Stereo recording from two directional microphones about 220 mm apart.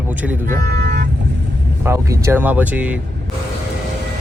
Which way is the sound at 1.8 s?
10° right (ahead or behind).